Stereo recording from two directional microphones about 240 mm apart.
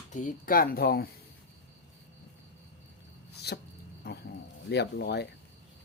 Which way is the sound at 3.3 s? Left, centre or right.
Left.